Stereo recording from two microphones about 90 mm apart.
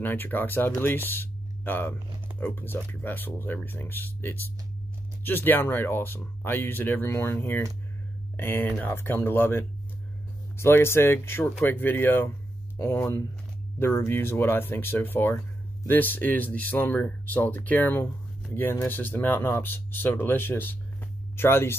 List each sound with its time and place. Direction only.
0.0 s speech: 20° left (ahead or behind)
1.1 s music: 25° left (ahead or behind)
2.4 s speech: 20° left (ahead or behind)